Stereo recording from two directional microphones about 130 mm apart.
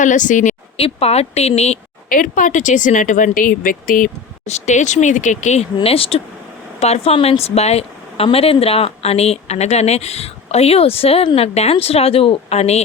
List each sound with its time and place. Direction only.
0.0 s speech: 75° left (ahead or behind)
0.8 s a woman's voice: 50° left (ahead or behind)
2.0 s a woman's voice: 90° left; by 12.8 s 55° left (ahead or behind)